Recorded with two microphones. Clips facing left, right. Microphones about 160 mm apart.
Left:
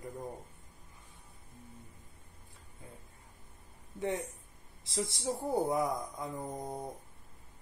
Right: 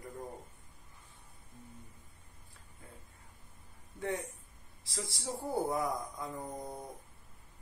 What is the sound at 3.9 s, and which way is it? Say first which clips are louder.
Speech: left 2 dB; 20° left (ahead or behind).